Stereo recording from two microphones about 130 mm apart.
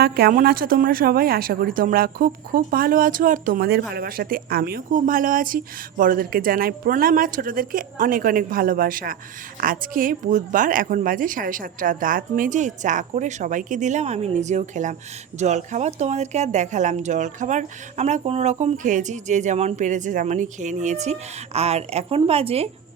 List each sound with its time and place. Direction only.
0.3 s speech: 90° right
4.9 s speech: 85° right; by 22.7 s 50° right (ahead or behind)